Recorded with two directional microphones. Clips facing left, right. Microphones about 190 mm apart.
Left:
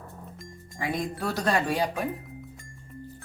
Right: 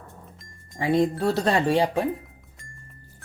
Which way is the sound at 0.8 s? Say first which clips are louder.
Right 8 dB; 25° right (ahead or behind).